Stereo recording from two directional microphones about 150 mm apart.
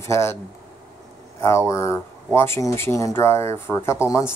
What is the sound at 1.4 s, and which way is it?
Speech, 20° left (ahead or behind).